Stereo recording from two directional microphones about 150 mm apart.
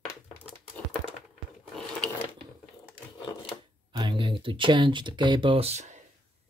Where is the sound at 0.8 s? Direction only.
5° left (ahead or behind).